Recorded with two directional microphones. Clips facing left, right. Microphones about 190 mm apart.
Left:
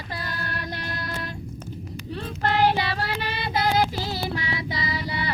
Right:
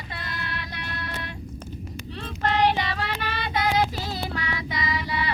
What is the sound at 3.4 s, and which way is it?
Child singing, 35° left (ahead or behind).